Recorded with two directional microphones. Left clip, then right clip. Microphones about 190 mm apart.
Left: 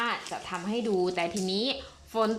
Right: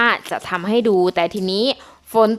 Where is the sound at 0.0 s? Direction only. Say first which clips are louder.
Right 14 dB; 45° right (ahead or behind).